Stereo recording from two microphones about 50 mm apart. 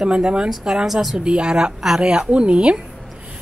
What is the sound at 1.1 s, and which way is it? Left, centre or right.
A woman's voice, centre.